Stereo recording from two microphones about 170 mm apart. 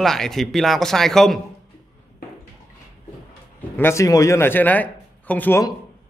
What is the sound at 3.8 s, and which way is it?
A man's voice, 15° left (ahead or behind).